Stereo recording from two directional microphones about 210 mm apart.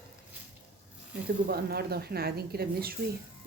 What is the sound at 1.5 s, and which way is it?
A woman's voice, 50° right (ahead or behind).